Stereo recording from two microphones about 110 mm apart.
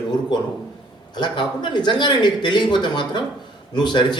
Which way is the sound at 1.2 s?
45° left (ahead or behind).